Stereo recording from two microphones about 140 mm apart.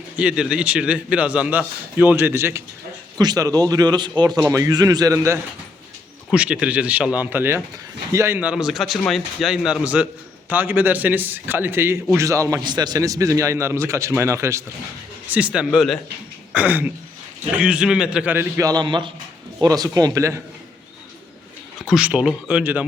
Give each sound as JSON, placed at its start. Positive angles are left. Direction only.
{"t": 0.2, "sound": "a man's voice", "side_deg": -5}
{"t": 3.2, "sound": "a man's voice", "side_deg": -30}
{"t": 6.3, "sound": "a man's voice", "side_deg": -5}
{"t": 15.3, "sound": "a man's voice", "side_deg": -10}
{"t": 16.5, "sound": "throat clearing", "side_deg": -10}
{"t": 17.5, "sound": "a man's voice", "side_deg": -10}
{"t": 21.8, "sound": "a man's voice", "side_deg": -5}